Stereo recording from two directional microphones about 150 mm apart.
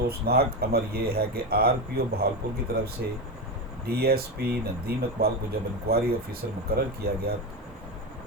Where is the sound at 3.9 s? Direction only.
90° right.